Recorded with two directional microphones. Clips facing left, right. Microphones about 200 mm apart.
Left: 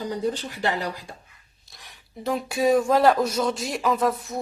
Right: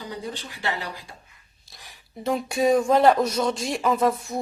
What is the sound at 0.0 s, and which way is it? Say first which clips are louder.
Speech: left 7 dB; 45° left (ahead or behind).